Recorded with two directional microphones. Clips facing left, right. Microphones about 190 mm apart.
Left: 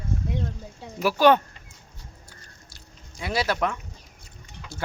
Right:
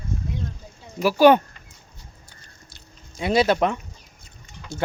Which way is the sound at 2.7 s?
20° right (ahead or behind).